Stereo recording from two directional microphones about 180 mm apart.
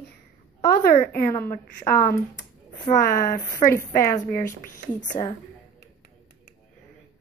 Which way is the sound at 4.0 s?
15° left (ahead or behind).